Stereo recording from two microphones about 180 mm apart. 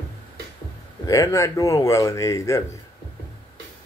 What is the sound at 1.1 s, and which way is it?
Speech, 15° left (ahead or behind).